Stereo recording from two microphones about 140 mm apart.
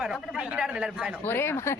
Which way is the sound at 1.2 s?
15° left (ahead or behind).